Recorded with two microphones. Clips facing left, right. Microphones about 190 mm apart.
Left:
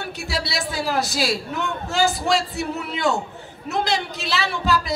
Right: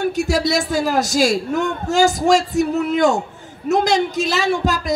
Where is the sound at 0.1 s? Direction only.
45° right (ahead or behind).